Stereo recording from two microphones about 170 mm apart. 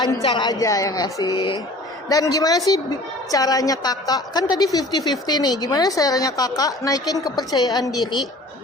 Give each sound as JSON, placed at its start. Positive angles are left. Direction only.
{"t": 0.2, "sound": "a woman's voice", "side_deg": 30}